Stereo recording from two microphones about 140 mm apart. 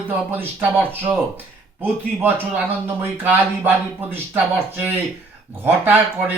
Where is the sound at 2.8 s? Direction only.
15° right (ahead or behind).